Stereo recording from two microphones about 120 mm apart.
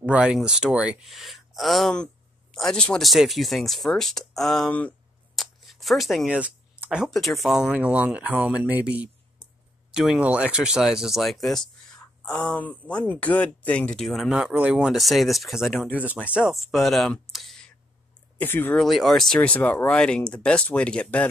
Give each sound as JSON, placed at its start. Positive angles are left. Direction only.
{"t": 0.0, "sound": "speech", "side_deg": -10}
{"t": 5.3, "sound": "a sound", "side_deg": 0}
{"t": 7.1, "sound": "speech", "side_deg": 0}
{"t": 18.4, "sound": "speech", "side_deg": 15}
{"t": 18.8, "sound": "speech", "side_deg": 0}